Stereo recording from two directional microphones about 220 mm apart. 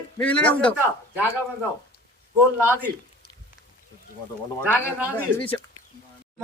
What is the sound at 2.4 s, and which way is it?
Speech, 10° right (ahead or behind).